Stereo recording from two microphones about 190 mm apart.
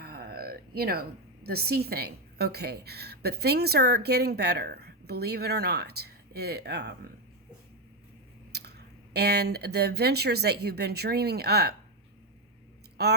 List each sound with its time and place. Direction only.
0.0 s a sound: 55° right (ahead or behind)
1.5 s a woman's voice: 55° right (ahead or behind)
8.5 s speech: 60° right (ahead or behind)
13.0 s a woman's voice: 60° right (ahead or behind)